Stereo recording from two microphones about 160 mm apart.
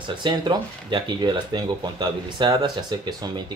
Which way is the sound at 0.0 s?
25° right (ahead or behind).